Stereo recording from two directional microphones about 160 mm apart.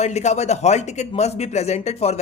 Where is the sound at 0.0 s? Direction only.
45° left (ahead or behind).